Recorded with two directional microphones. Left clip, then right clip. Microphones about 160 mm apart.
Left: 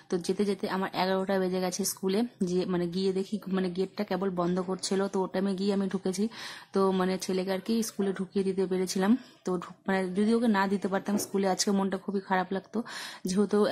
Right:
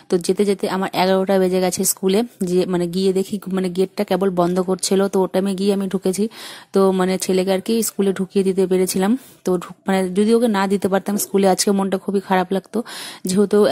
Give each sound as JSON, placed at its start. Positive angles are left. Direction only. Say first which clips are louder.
{"t": 0.1, "sound": "speech", "louder": "right 12 dB", "side_deg": -40}